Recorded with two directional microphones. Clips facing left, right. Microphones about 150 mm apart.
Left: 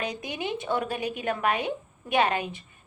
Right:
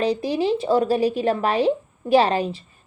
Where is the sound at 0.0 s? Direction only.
30° right (ahead or behind).